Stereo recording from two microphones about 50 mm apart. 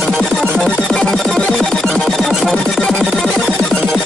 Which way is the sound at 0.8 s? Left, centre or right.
Centre.